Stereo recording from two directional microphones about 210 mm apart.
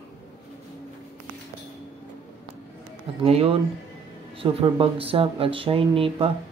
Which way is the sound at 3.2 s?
25° right (ahead or behind).